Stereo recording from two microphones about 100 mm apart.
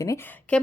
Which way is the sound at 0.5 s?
10° left (ahead or behind).